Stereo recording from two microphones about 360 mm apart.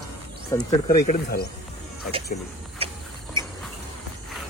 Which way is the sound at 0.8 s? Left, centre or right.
Left.